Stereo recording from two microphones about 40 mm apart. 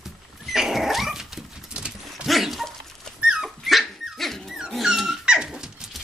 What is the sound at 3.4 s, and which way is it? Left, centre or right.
Dog, centre.